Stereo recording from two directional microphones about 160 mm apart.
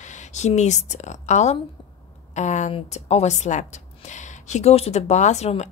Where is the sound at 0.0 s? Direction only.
50° left (ahead or behind).